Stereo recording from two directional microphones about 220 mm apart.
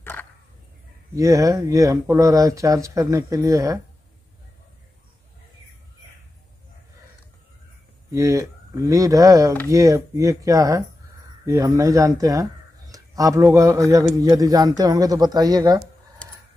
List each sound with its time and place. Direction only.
0.0 s a sound: 10° left (ahead or behind)
1.1 s speech: 15° right (ahead or behind)
8.1 s speech: 15° right (ahead or behind)